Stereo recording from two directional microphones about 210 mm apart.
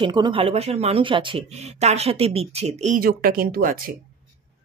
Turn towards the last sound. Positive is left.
turn(degrees=-40)  # may be behind; listen again after turning